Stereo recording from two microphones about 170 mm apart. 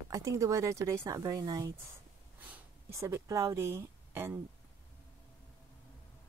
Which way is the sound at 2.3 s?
10° right (ahead or behind).